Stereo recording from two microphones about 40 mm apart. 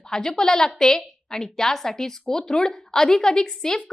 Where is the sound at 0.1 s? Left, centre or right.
Centre.